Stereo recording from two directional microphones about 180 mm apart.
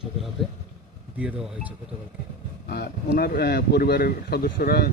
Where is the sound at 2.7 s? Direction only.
60° left (ahead or behind).